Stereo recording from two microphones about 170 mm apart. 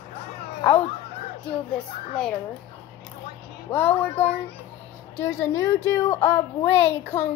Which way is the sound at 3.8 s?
35° left (ahead or behind).